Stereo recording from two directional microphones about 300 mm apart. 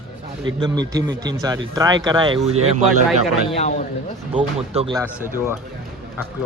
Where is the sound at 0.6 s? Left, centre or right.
Centre.